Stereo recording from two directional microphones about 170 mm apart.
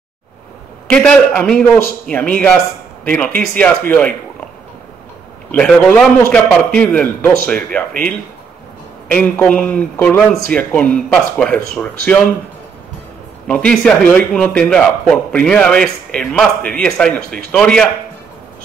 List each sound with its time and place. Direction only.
0.8 s a man's voice: 5° left (ahead or behind)
5.5 s a man's voice: 5° left (ahead or behind)
13.5 s a man's voice: 5° left (ahead or behind)